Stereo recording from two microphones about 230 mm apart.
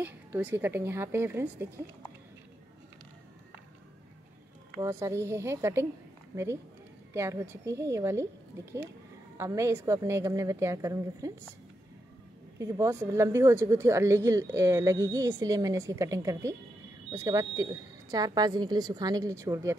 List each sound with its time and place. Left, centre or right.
0.0 s a woman's voice: centre
4.7 s a woman's voice: centre
9.4 s a woman's voice: centre
12.5 s a woman's voice: centre